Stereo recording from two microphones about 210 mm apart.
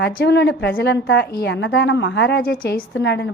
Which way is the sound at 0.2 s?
55° left (ahead or behind).